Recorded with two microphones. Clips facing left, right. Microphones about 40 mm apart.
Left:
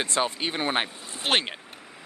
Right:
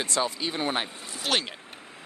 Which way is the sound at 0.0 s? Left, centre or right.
Left.